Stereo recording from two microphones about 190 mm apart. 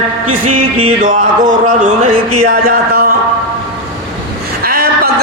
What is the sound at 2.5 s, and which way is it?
Speech, 50° right (ahead or behind).